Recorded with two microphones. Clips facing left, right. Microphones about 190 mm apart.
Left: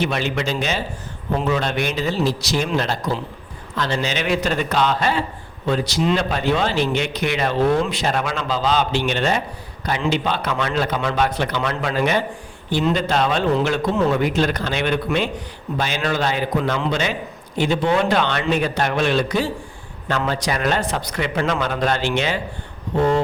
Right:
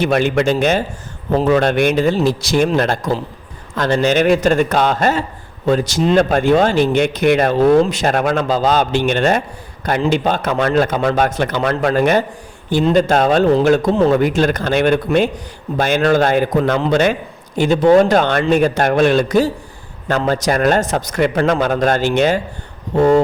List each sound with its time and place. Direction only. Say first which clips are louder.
0.0 s speech: right 7 dB; 50° right (ahead or behind)